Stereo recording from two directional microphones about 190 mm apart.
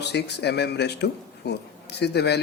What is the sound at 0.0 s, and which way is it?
Speech, 60° left (ahead or behind).